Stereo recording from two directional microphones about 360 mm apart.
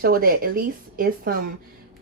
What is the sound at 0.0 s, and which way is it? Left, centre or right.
Speech, right.